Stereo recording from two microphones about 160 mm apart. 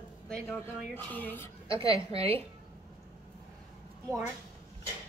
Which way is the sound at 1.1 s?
10° left (ahead or behind).